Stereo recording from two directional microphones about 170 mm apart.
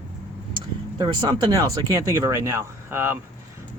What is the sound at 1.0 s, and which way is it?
Speech, 25° right (ahead or behind).